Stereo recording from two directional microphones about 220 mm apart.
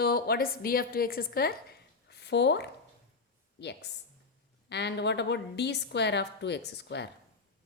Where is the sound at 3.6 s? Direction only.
50° left (ahead or behind).